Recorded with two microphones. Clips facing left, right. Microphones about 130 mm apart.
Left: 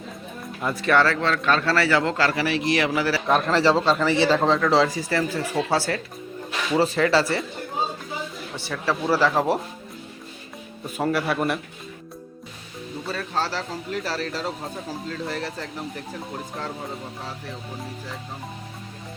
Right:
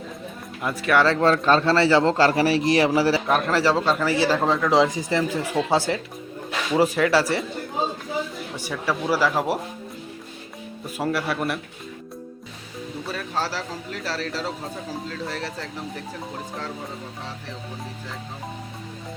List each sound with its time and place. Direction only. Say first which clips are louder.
0.8 s speech: even; 10° right (ahead or behind)
1.2 s a man's voice: right 4 dB; 35° right (ahead or behind)
3.2 s speech: left 1 dB; 5° right (ahead or behind)
8.5 s speech: even; 15° right (ahead or behind)
10.9 s a man's voice: left 2 dB; centre (ahead or behind)
13.1 s a man's voice: left 1 dB; 10° right (ahead or behind)